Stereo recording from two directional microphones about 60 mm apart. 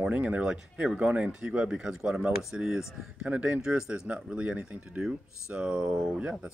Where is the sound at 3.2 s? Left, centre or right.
Right.